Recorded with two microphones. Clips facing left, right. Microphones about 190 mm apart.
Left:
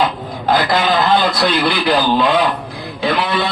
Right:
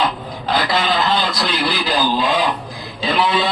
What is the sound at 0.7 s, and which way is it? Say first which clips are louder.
Speech: left 3 dB; 55° left (ahead or behind).